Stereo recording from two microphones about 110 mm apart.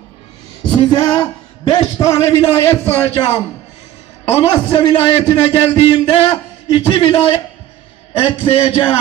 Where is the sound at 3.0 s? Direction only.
55° left (ahead or behind).